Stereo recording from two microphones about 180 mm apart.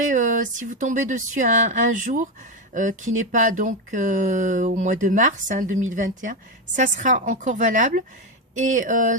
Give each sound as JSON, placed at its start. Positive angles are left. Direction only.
{"t": 0.0, "sound": "speech", "side_deg": -45}